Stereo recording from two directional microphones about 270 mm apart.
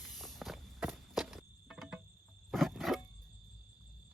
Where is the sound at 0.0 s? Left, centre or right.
Centre.